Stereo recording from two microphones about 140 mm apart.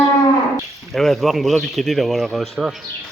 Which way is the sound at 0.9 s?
Centre (ahead or behind).